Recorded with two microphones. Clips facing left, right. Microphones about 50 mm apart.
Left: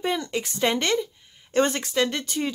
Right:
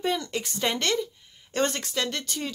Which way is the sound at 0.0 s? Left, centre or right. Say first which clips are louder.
Left 2 dB; centre.